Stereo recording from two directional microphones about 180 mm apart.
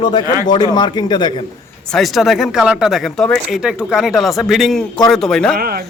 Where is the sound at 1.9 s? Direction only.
Centre (ahead or behind).